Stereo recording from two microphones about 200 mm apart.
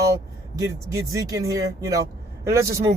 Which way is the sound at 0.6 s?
15° right (ahead or behind).